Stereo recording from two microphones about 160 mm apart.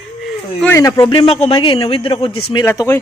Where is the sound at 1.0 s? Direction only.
30° left (ahead or behind).